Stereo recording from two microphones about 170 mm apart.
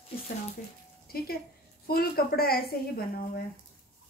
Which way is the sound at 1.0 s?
65° left (ahead or behind).